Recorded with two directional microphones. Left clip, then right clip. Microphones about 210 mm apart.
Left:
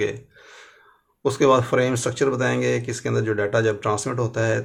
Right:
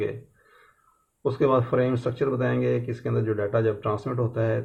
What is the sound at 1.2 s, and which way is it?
Speech, 25° left (ahead or behind).